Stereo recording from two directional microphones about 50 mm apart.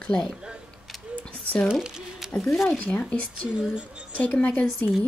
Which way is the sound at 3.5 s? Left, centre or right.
Right.